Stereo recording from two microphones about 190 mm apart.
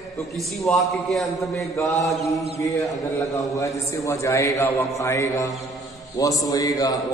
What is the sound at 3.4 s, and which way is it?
A man's voice, 15° left (ahead or behind).